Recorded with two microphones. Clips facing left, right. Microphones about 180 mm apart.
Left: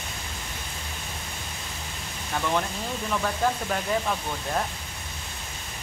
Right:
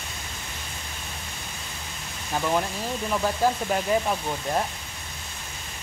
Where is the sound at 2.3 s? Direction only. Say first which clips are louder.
Right 2 dB; 15° right (ahead or behind).